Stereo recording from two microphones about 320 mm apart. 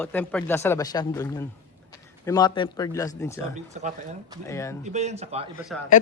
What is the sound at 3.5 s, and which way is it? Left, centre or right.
Speech, right.